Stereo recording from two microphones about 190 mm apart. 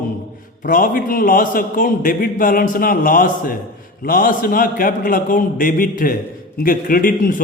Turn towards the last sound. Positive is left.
turn(degrees=50)  # may be behind; listen again after turning